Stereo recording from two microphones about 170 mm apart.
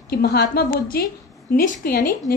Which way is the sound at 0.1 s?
65° left (ahead or behind).